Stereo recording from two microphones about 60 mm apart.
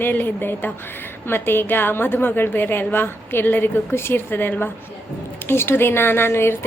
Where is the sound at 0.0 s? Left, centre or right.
Left.